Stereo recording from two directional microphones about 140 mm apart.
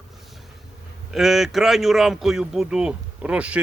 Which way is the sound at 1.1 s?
Centre (ahead or behind).